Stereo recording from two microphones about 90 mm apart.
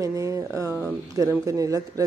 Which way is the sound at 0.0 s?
35° right (ahead or behind).